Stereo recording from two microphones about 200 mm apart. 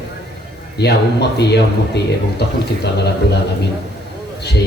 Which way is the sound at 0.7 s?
55° left (ahead or behind).